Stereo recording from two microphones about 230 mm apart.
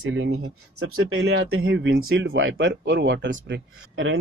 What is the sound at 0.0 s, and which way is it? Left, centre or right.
Speech, right.